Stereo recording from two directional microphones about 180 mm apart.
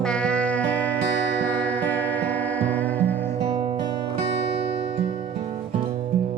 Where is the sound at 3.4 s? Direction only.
30° right (ahead or behind).